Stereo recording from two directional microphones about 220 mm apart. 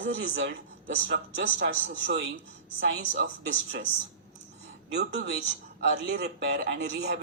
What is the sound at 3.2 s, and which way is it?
Speech, 50° right (ahead or behind).